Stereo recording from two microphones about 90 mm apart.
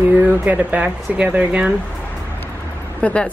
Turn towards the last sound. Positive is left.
turn(degrees=15)  # may be behind; listen again after turning